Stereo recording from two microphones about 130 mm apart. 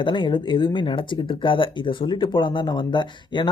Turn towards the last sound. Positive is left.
turn(degrees=35)  # may be behind; listen again after turning